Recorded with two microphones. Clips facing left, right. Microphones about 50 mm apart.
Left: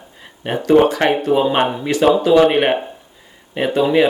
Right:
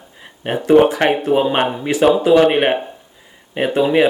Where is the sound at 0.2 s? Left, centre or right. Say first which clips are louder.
Right 1 dB; centre.